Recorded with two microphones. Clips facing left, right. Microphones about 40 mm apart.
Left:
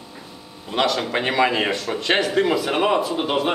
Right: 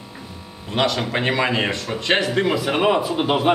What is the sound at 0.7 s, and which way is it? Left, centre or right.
Speech, centre.